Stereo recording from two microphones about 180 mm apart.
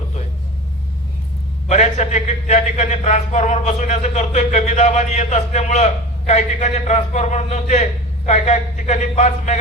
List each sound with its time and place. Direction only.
1.6 s a man's voice: 40° left (ahead or behind)